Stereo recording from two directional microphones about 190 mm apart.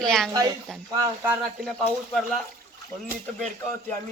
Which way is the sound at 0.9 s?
15° right (ahead or behind).